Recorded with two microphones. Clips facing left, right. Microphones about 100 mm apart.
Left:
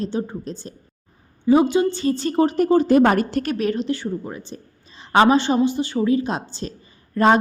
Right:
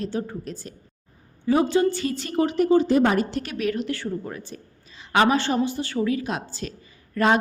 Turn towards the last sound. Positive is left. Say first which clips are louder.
# left 4 dB
turn(degrees=30)  # may be behind; listen again after turning